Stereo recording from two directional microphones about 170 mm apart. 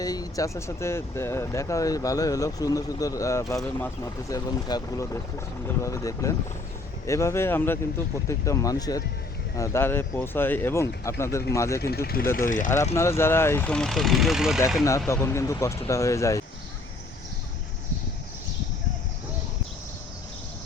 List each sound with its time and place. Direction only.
0.0 s speech: 20° left (ahead or behind)
12.5 s speech: 50° left (ahead or behind)
12.7 s speech: 15° left (ahead or behind); by 14.6 s 5° right (ahead or behind)
14.8 s speech: 15° left (ahead or behind)